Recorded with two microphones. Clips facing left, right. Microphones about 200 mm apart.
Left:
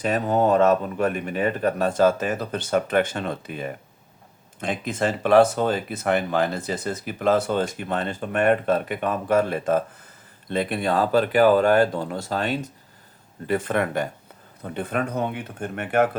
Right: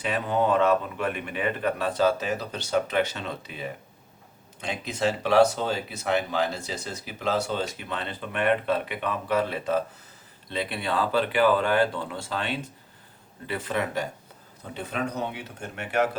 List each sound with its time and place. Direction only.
0.0 s speech: 40° left (ahead or behind)